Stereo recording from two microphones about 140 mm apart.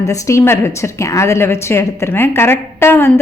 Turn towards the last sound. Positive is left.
turn(degrees=15)  # may be behind; listen again after turning